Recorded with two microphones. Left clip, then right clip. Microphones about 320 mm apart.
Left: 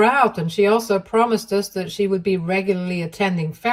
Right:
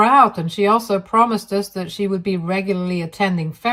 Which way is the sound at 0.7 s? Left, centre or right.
Right.